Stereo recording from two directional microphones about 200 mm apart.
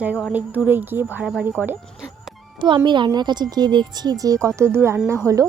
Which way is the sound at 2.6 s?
25° right (ahead or behind).